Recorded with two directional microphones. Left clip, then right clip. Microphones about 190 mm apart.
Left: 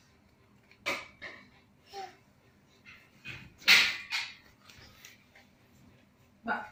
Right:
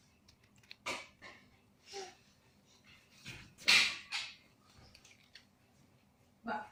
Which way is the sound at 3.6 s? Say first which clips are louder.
Left 6 dB; 55° right (ahead or behind).